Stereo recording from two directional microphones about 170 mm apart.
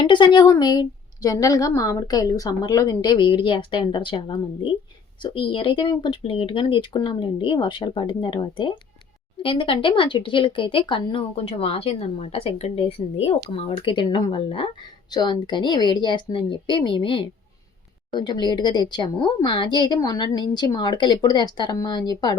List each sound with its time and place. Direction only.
0.0 s a woman's voice: 25° left (ahead or behind)